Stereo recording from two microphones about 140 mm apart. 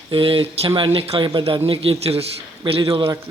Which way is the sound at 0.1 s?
40° right (ahead or behind).